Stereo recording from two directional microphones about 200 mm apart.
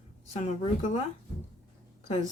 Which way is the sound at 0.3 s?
35° left (ahead or behind).